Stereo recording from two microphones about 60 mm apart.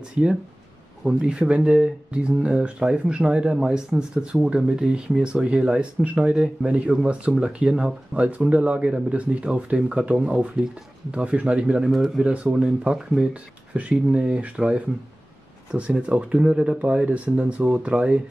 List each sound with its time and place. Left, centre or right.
0.2 s speech: centre